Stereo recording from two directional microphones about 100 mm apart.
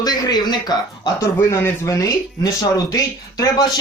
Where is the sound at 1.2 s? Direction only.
30° left (ahead or behind).